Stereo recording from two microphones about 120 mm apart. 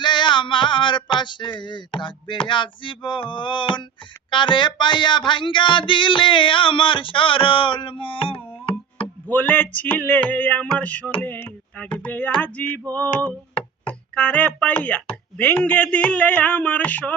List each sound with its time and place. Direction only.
0.0 s a sound: 40° left (ahead or behind)
4.3 s music: 40° left (ahead or behind)
9.2 s speech: 15° left (ahead or behind)
11.2 s knock: 15° left (ahead or behind)
11.9 s speech: 15° left (ahead or behind)